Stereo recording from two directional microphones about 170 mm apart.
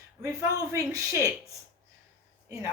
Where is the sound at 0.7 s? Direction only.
20° right (ahead or behind).